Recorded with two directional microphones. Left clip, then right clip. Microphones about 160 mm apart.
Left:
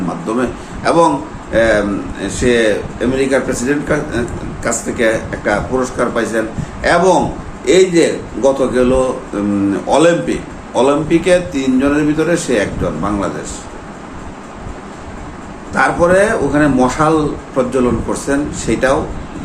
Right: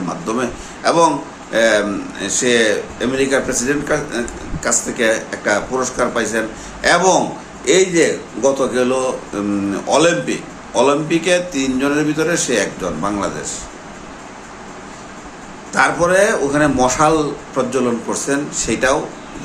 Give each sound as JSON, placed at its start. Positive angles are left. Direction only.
{"t": 0.3, "sound": "a man's voice", "side_deg": -15}
{"t": 15.7, "sound": "a man's voice", "side_deg": -15}